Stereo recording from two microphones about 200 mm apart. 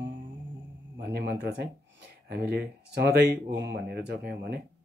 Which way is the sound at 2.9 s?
55° right (ahead or behind).